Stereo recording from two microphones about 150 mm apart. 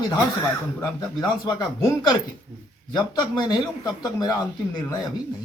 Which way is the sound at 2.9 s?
25° left (ahead or behind).